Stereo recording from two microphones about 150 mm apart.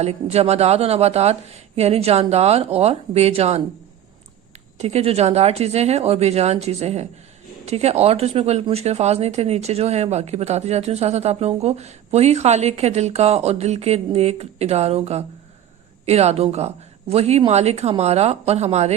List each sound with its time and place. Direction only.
0.0 s speech: 45° right (ahead or behind)
4.8 s speech: 45° right (ahead or behind)